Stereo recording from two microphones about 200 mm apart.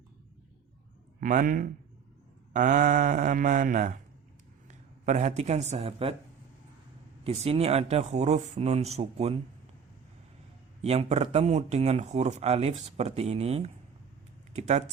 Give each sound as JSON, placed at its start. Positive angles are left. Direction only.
{"t": 1.2, "sound": "a man's voice", "side_deg": -40}
{"t": 7.3, "sound": "speech", "side_deg": -30}
{"t": 10.8, "sound": "speech", "side_deg": -30}